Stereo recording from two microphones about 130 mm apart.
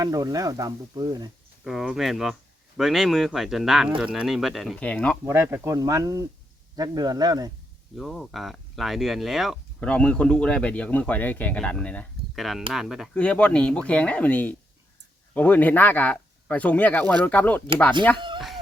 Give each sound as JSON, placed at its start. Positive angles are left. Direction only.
{"t": 0.0, "sound": "speech", "side_deg": -30}
{"t": 1.6, "sound": "speech", "side_deg": -5}
{"t": 4.8, "sound": "speech", "side_deg": 10}
{"t": 5.2, "sound": "speech", "side_deg": -15}
{"t": 7.9, "sound": "speech", "side_deg": 0}
{"t": 12.7, "sound": "speech", "side_deg": -5}
{"t": 13.1, "sound": "speech", "side_deg": 10}
{"t": 18.3, "sound": "chicken", "side_deg": 0}